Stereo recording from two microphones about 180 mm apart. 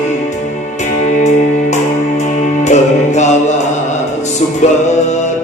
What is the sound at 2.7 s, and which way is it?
Music, 40° left (ahead or behind).